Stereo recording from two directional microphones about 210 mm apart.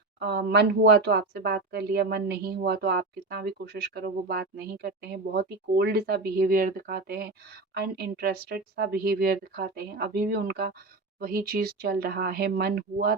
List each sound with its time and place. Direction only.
0.2 s speech: 50° right (ahead or behind)